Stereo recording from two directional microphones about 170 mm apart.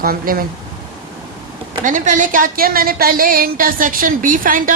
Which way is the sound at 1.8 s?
50° right (ahead or behind).